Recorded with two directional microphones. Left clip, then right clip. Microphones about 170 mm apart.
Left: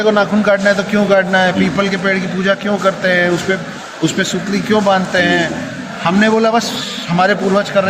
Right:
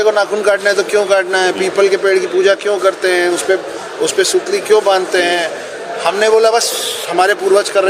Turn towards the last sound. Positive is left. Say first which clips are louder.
# right 2 dB
turn(degrees=-45)  # may be behind; listen again after turning